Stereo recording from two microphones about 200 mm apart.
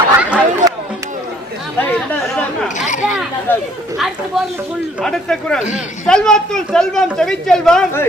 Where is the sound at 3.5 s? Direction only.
10° left (ahead or behind).